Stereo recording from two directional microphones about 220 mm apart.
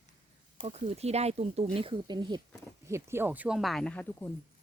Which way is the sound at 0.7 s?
30° right (ahead or behind).